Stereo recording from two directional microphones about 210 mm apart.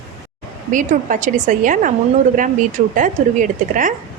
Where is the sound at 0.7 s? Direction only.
40° right (ahead or behind).